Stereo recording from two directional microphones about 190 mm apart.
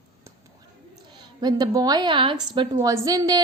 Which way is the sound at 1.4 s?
20° right (ahead or behind).